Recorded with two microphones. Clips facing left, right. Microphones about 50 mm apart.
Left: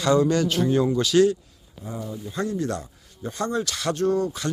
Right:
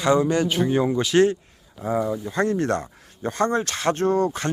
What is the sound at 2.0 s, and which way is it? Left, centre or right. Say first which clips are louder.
Speech: right 9 dB; right.